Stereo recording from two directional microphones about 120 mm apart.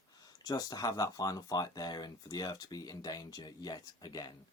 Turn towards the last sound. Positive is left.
turn(degrees=35)  # may be behind; listen again after turning